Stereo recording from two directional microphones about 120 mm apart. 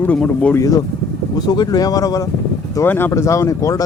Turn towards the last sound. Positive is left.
turn(degrees=25)  # may be behind; listen again after turning